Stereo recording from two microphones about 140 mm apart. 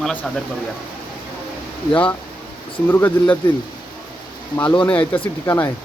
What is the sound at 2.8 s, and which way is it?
Speech, 15° left (ahead or behind).